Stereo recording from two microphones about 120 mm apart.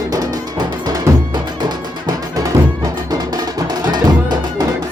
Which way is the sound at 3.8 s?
35° right (ahead or behind).